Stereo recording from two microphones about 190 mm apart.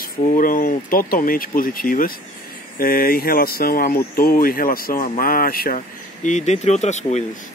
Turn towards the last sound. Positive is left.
turn(degrees=35)  # may be behind; listen again after turning